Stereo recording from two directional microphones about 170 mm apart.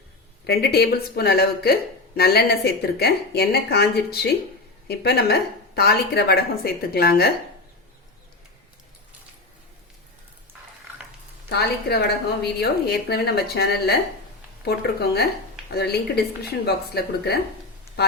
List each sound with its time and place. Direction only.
0.4 s speech: 70° left (ahead or behind)
11.4 s speech: 70° left (ahead or behind)